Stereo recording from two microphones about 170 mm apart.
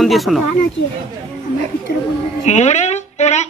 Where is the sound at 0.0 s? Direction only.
Centre (ahead or behind).